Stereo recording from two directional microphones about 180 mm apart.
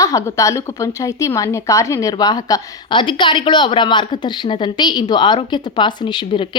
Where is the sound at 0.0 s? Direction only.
15° left (ahead or behind).